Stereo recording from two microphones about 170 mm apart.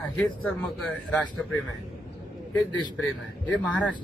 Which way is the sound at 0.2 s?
5° left (ahead or behind).